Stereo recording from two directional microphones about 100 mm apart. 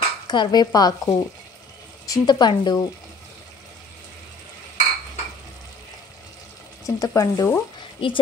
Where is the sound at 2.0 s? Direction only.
35° left (ahead or behind).